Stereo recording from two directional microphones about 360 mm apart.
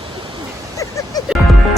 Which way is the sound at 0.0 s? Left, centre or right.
Centre.